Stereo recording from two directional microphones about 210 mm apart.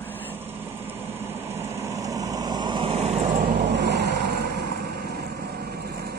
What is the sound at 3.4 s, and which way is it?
Vehicle, 55° right (ahead or behind).